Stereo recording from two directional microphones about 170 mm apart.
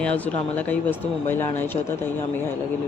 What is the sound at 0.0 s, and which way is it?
Speech, 5° left (ahead or behind).